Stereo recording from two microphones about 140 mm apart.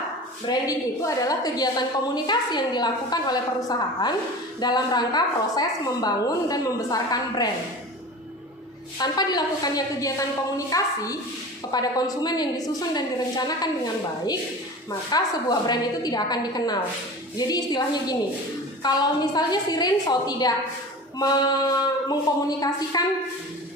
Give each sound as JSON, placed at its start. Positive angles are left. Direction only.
{"t": 0.4, "sound": "a woman's voice", "side_deg": 25}
{"t": 9.0, "sound": "a woman's voice", "side_deg": 30}